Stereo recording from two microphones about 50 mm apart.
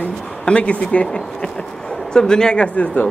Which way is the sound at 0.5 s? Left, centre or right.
Left.